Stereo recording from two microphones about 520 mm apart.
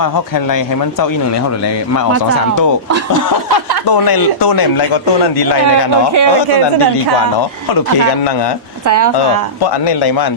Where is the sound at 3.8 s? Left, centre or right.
Left.